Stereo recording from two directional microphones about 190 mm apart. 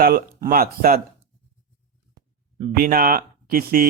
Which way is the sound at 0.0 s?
50° right (ahead or behind).